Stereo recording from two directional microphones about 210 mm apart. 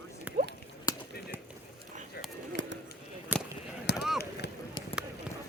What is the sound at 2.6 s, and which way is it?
Bird, 60° right (ahead or behind).